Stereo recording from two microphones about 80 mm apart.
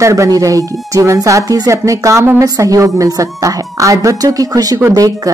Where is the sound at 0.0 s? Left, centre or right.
Right.